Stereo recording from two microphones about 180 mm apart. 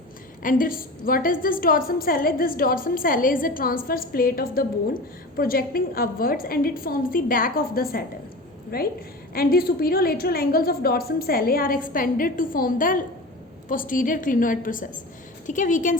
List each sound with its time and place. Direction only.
0.4 s a woman's voice: 50° left (ahead or behind)